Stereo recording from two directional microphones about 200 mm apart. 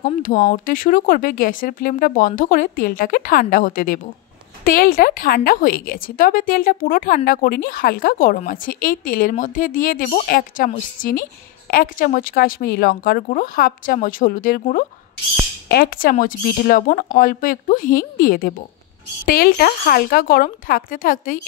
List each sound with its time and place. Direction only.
0.0 s speech: 40° left (ahead or behind)